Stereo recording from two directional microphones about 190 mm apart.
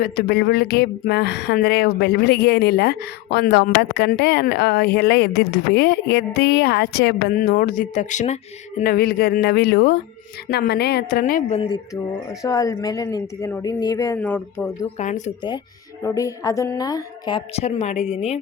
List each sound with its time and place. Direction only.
0.0 s speech: 55° left (ahead or behind); by 8.4 s 40° left (ahead or behind)
8.8 s speech: 50° left (ahead or behind)
11.5 s speech: 30° left (ahead or behind)
12.4 s speech: 20° left (ahead or behind)
14.9 s speech: 40° left (ahead or behind)
16.0 s speech: 15° left (ahead or behind)
17.6 s speech: 35° left (ahead or behind)